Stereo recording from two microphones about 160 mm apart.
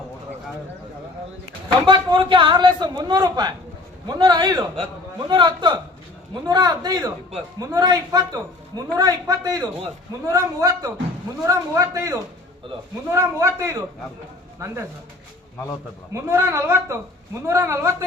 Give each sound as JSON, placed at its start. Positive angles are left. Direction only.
{"t": 1.9, "sound": "a man's voice", "side_deg": -30}
{"t": 16.1, "sound": "a woman's voice", "side_deg": -15}